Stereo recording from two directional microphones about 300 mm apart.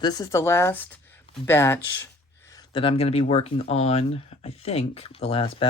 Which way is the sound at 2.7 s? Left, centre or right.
Centre.